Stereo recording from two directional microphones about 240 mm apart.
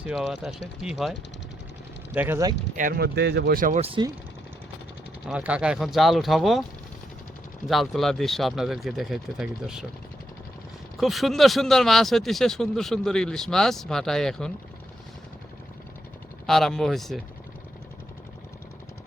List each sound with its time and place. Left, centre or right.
0.0 s speech: centre
2.1 s speech: centre
2.7 s speech: right
5.2 s speech: centre
7.7 s speech: centre
10.9 s speech: centre
16.5 s speech: centre